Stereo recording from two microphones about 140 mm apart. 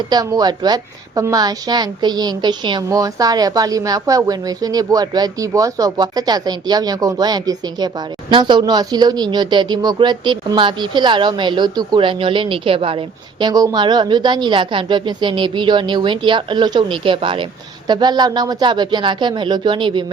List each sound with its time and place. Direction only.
0.1 s a woman's voice: 25° right (ahead or behind)
13.5 s a woman's voice: 25° right (ahead or behind)